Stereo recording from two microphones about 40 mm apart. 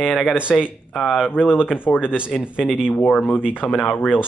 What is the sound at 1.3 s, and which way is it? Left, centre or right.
Speech, left.